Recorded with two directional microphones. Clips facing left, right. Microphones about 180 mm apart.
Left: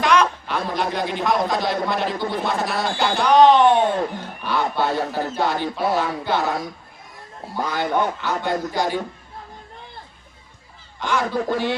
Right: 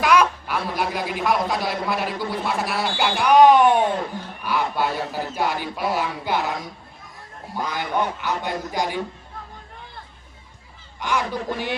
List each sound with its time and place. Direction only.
0.0 s a sound: 5° right (ahead or behind)
1.2 s speech: 10° right (ahead or behind)
7.7 s speech: 15° right (ahead or behind)
11.0 s speech: 15° right (ahead or behind)